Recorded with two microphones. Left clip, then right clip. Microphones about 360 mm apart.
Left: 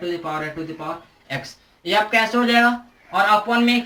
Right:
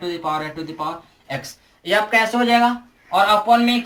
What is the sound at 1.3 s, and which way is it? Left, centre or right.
Speech, centre.